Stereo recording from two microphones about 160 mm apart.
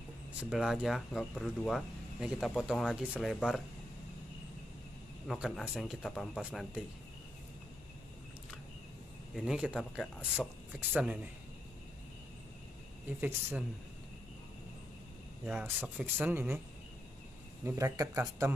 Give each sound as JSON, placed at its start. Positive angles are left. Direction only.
{"t": 0.4, "sound": "speech", "side_deg": -5}
{"t": 5.3, "sound": "speech", "side_deg": 0}
{"t": 9.3, "sound": "speech", "side_deg": -5}
{"t": 13.2, "sound": "speech", "side_deg": -10}
{"t": 15.4, "sound": "speech", "side_deg": -10}
{"t": 17.6, "sound": "speech", "side_deg": -20}